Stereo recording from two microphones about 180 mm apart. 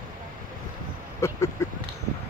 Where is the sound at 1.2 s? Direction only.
15° left (ahead or behind).